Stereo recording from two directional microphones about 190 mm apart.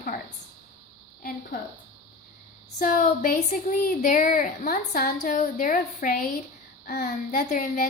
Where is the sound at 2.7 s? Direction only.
45° left (ahead or behind).